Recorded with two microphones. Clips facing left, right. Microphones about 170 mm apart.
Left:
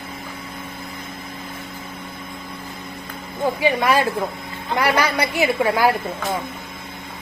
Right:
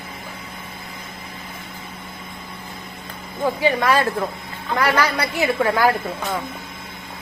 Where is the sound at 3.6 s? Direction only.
15° left (ahead or behind).